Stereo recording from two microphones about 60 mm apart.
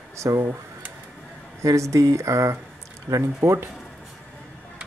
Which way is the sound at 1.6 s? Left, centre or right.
Right.